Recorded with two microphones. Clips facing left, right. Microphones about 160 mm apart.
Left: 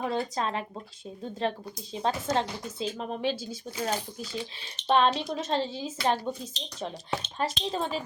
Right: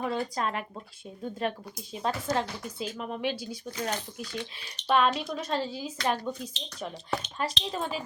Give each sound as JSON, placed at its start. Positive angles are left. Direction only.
{"t": 0.0, "sound": "speech", "side_deg": 30}
{"t": 3.8, "sound": "speech", "side_deg": 10}
{"t": 4.6, "sound": "speech", "side_deg": 25}